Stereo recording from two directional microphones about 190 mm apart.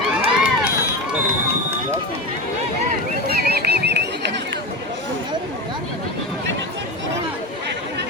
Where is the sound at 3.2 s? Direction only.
55° right (ahead or behind).